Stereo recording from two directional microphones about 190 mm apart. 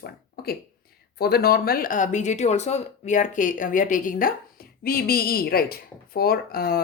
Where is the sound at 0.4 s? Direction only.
55° left (ahead or behind).